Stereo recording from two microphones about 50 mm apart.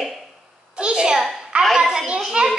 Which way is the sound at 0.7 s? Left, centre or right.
Centre.